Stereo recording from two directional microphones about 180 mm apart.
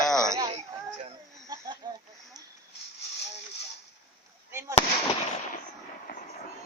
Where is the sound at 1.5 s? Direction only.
25° right (ahead or behind).